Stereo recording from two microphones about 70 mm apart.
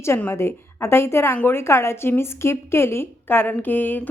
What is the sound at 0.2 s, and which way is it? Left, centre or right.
A woman's voice, left.